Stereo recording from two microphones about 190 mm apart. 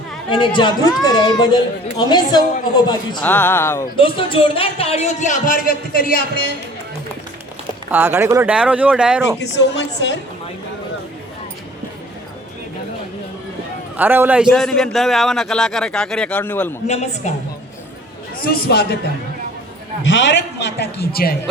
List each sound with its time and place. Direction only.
0.3 s speech: 25° left (ahead or behind)
3.2 s speech: 10° left (ahead or behind)
3.9 s a man's voice: 25° left (ahead or behind); by 6.4 s 50° left (ahead or behind)
7.9 s speech: 10° right (ahead or behind)
9.4 s a man's voice: 65° left (ahead or behind)
13.9 s a man's voice: 10° right (ahead or behind); by 16.7 s 10° left (ahead or behind)
16.8 s a man's voice: 35° left (ahead or behind)
18.4 s a man's voice: 55° left (ahead or behind)
20.1 s a man's voice: 75° left (ahead or behind); by 21.3 s 55° left (ahead or behind)